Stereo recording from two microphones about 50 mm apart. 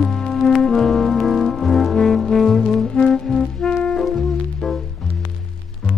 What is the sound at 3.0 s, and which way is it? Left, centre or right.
Music, centre.